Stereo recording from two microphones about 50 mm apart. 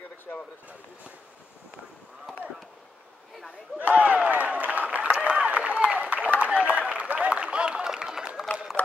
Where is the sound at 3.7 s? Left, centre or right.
Right; by 8.3 s centre.